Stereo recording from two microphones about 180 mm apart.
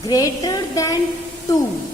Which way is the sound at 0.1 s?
20° left (ahead or behind).